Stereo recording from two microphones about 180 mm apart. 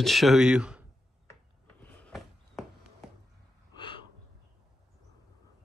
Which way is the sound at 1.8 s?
10° left (ahead or behind).